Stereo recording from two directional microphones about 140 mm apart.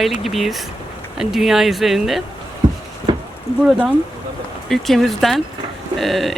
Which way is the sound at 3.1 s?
35° right (ahead or behind).